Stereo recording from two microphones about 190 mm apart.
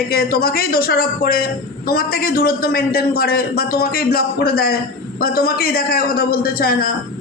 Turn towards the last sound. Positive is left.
turn(degrees=50)  # may be behind; listen again after turning